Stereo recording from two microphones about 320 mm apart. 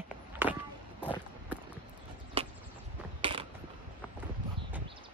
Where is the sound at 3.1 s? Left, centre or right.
Centre.